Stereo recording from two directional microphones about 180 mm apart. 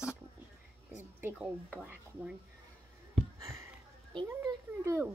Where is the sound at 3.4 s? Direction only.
15° right (ahead or behind).